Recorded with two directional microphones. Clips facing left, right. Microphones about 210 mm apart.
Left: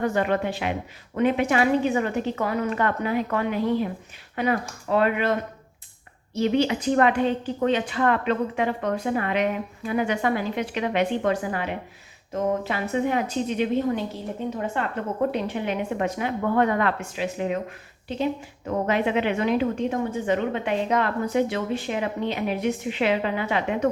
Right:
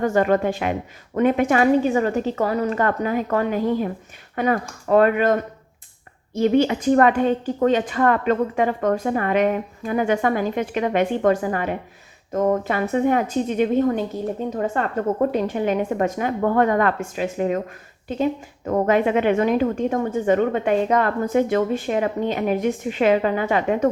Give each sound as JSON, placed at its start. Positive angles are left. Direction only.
{"t": 0.0, "sound": "a woman's voice", "side_deg": -45}